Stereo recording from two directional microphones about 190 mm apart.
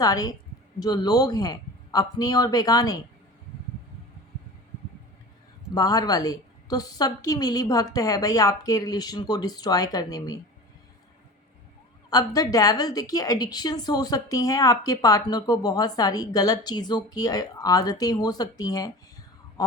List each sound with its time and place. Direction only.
0.0 s a woman's voice: 20° left (ahead or behind)
5.7 s a woman's voice: 20° left (ahead or behind)
12.1 s a woman's voice: 20° left (ahead or behind)